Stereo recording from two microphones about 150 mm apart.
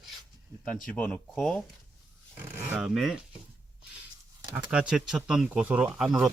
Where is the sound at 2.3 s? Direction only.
15° right (ahead or behind).